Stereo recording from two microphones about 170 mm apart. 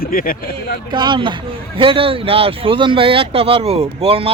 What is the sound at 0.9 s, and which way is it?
Speech, 25° right (ahead or behind).